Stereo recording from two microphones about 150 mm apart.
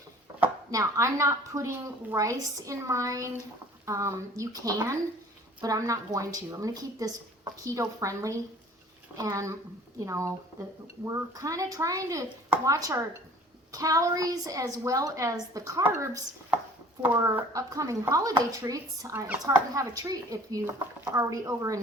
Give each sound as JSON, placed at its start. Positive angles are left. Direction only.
{"t": 0.7, "sound": "a woman's voice", "side_deg": -20}
{"t": 17.3, "sound": "a woman's voice", "side_deg": -20}